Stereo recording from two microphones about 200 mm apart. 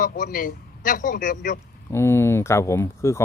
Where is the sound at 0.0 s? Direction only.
45° left (ahead or behind).